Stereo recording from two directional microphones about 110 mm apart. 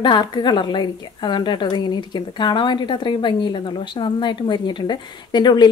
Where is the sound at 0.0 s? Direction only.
40° left (ahead or behind).